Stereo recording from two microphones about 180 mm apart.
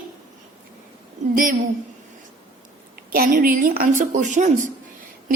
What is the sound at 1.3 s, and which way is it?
Speech, 50° right (ahead or behind).